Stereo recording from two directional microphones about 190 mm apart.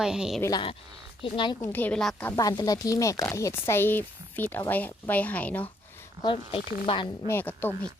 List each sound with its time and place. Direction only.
0.0 s a woman's voice: 5° right (ahead or behind)
1.2 s speech: 25° left (ahead or behind)
1.6 s speech: 10° left (ahead or behind)
2.3 s speech: 20° left (ahead or behind)
6.2 s speech: 25° left (ahead or behind)
7.3 s speech: 10° left (ahead or behind)